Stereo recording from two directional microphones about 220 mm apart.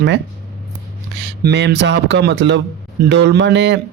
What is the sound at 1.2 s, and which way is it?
Speech, 50° right (ahead or behind).